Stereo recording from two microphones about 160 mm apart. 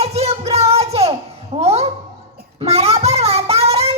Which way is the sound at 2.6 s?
40° right (ahead or behind).